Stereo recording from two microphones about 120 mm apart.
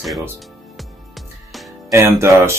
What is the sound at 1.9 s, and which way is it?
Speech, 20° right (ahead or behind).